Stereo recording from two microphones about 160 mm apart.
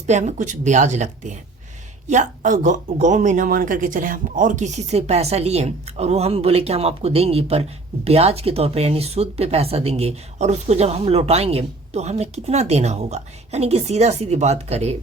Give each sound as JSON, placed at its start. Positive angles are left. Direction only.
{"t": 0.1, "sound": "speech", "side_deg": -45}